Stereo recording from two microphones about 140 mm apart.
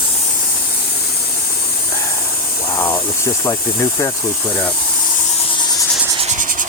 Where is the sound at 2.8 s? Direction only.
20° left (ahead or behind).